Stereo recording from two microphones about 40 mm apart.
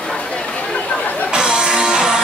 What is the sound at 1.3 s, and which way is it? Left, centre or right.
Music, right.